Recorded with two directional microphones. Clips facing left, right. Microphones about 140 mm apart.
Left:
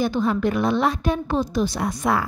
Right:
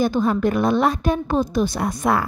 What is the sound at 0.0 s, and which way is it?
A woman's voice, 45° right (ahead or behind).